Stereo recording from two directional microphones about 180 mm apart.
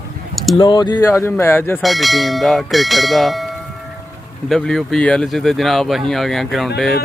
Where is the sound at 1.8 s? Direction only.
Centre (ahead or behind).